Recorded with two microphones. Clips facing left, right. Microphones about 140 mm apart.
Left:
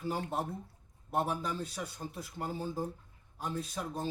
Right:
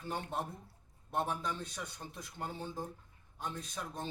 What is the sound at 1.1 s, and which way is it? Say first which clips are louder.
A man's voice: left 3 dB; 5° left (ahead or behind).